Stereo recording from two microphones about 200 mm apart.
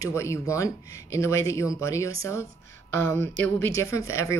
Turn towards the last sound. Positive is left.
turn(degrees=15)  # may be behind; listen again after turning